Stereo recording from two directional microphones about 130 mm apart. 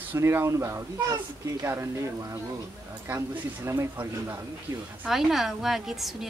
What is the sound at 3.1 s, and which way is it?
Speech, 20° right (ahead or behind).